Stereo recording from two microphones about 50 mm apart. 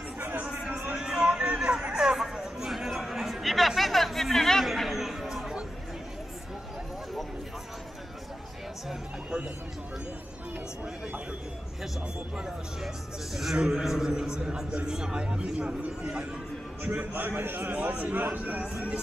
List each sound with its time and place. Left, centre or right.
0.2 s chatter: right
0.9 s a sound: centre
2.1 s chatter: centre
12.4 s a man's voice: centre
16.8 s a man's voice: right